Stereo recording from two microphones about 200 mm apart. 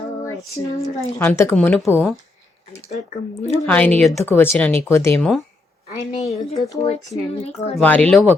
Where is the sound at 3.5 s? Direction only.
10° left (ahead or behind).